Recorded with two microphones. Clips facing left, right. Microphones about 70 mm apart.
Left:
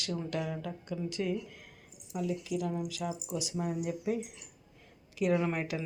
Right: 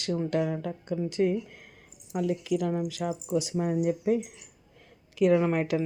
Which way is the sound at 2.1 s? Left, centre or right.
Right.